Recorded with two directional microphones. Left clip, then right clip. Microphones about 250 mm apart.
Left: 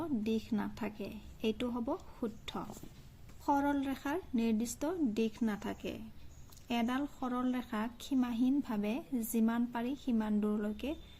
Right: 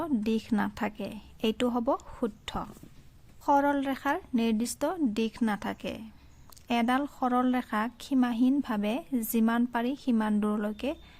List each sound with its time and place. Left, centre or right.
0.0 s speech: right